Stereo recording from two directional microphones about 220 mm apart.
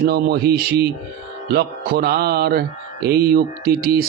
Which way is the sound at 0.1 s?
45° right (ahead or behind).